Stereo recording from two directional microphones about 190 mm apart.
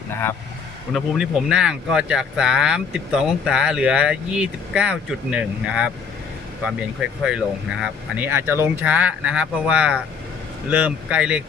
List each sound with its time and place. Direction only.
0.1 s speech: 10° left (ahead or behind)
0.9 s speech: 5° right (ahead or behind)
7.3 s speech: 5° right (ahead or behind)